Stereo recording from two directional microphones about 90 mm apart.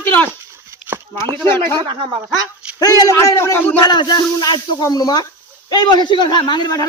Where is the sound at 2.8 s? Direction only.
45° left (ahead or behind); by 3.7 s 25° left (ahead or behind).